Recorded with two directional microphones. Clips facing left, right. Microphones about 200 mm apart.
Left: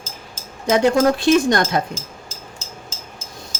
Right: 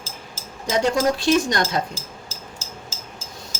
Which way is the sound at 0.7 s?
55° left (ahead or behind).